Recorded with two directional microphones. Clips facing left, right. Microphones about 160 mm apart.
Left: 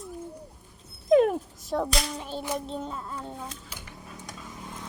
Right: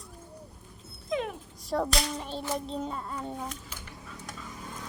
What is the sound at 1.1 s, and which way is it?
Dog, 45° left (ahead or behind).